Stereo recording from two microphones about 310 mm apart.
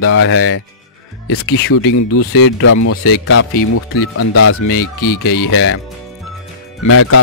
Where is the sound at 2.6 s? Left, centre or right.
Left.